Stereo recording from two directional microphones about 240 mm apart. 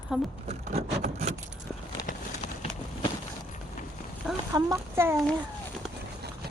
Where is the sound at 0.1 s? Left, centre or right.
Centre.